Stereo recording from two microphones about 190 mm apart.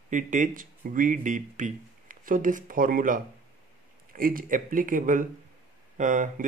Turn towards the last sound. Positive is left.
turn(degrees=-40)  # may be behind; listen again after turning